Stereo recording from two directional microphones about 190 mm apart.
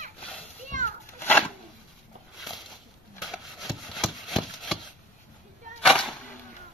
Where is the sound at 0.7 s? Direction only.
40° right (ahead or behind).